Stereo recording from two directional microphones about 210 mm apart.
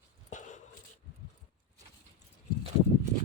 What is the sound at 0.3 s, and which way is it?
Dog, 35° left (ahead or behind).